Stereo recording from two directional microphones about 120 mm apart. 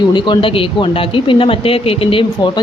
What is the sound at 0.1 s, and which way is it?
A woman's voice, 40° left (ahead or behind).